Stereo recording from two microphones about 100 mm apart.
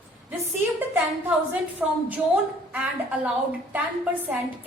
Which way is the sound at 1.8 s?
15° right (ahead or behind).